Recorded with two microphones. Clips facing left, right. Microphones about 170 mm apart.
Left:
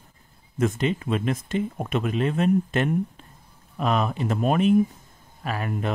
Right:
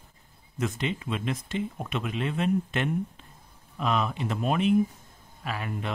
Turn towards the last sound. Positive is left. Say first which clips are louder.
# left 5 dB
turn(degrees=45)  # may be behind; listen again after turning